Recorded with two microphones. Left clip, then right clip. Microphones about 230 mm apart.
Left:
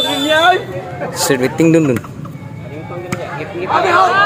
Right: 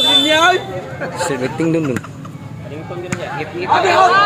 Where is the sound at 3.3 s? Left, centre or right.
Right.